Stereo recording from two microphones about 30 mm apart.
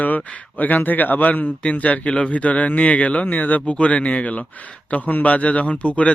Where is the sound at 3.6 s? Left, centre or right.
Left.